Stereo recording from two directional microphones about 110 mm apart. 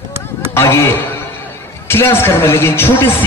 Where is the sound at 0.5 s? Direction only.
25° left (ahead or behind).